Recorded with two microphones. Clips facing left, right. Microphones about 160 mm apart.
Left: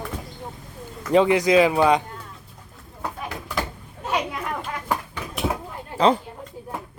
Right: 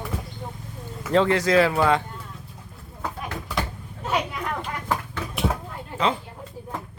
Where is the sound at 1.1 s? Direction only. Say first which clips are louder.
Left 3 dB; 15° left (ahead or behind).